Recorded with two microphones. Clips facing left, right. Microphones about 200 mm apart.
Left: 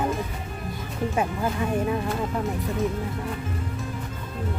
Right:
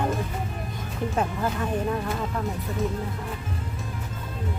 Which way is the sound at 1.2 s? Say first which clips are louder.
Left 1 dB; 10° left (ahead or behind).